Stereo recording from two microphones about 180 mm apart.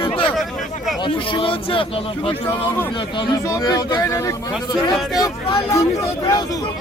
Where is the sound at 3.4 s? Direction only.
20° left (ahead or behind).